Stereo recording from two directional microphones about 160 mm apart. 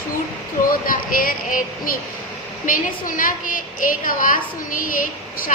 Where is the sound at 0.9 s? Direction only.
60° left (ahead or behind).